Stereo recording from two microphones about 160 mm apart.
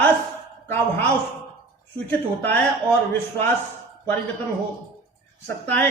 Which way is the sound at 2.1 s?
10° left (ahead or behind).